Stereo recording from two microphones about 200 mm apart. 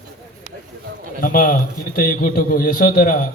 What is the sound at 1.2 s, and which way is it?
A man's voice, 45° left (ahead or behind).